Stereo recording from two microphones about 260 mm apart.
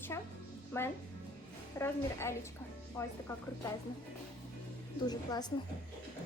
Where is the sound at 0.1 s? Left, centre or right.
Centre.